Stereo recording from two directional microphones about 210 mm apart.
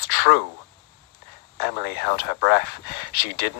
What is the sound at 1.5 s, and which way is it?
Speech, 50° left (ahead or behind).